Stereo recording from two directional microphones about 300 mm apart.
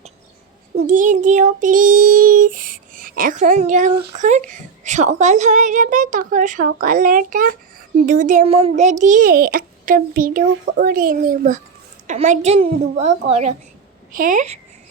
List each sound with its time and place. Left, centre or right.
0.8 s child singing: right